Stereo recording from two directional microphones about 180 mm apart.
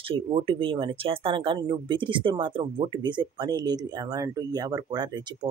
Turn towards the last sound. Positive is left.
turn(degrees=-20)  # may be behind; listen again after turning